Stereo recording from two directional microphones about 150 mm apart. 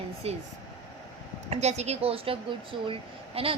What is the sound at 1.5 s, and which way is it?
A woman's voice, 45° right (ahead or behind).